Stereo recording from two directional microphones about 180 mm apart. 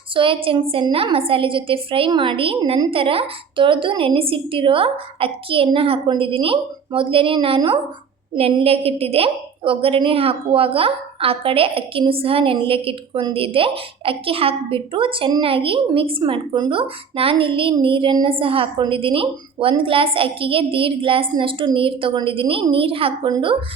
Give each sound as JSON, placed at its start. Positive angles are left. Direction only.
{"t": 0.1, "sound": "a woman's voice", "side_deg": -30}